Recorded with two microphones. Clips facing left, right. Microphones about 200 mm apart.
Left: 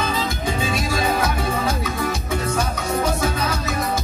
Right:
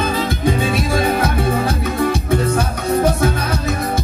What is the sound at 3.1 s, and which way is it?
Music, 55° right (ahead or behind).